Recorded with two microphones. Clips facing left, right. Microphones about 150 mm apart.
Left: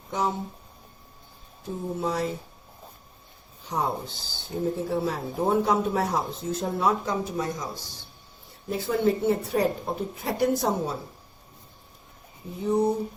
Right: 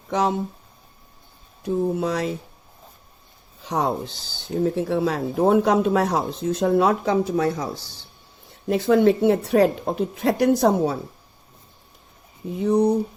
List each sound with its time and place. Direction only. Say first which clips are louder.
0.1 s speech: right 6 dB; 80° right
1.6 s speech: right 7 dB; 85° right
3.7 s speech: right 5 dB; 80° right
8.6 s speech: right 7 dB; 80° right
12.5 s speech: right 5 dB; 80° right